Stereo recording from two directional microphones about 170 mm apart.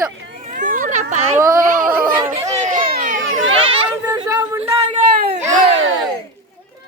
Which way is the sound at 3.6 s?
35° right (ahead or behind).